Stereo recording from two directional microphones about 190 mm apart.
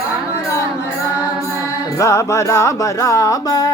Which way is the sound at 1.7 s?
15° left (ahead or behind).